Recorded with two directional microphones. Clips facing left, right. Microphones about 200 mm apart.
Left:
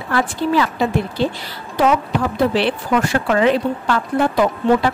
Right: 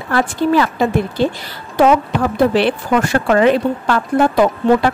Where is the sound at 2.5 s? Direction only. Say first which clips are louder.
Right 3 dB; 50° right (ahead or behind).